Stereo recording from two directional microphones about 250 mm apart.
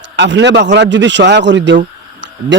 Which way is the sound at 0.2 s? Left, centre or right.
Right.